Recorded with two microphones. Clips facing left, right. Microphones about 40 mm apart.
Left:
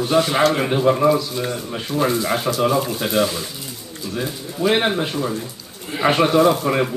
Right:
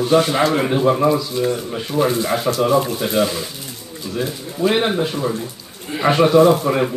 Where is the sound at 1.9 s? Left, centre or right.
Centre.